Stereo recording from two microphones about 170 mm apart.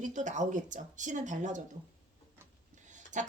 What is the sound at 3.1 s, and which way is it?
Speech, 45° right (ahead or behind).